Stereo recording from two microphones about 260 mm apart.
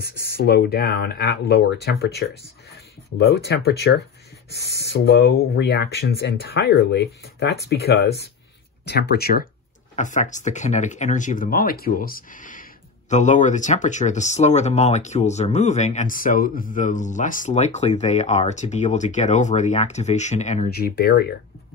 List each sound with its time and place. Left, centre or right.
0.0 s speech: left